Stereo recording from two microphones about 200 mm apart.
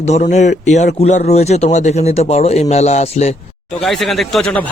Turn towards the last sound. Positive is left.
turn(degrees=0)  # may be behind; listen again after turning